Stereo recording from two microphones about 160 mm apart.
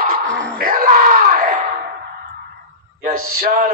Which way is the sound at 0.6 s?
60° right (ahead or behind).